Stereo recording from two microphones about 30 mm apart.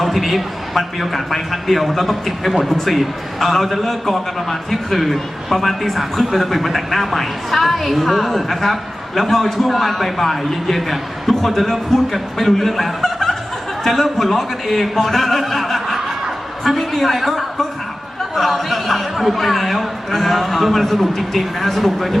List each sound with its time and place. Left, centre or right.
0.0 s a woman's voice: centre
13.0 s snicker: centre
13.8 s a woman's voice: centre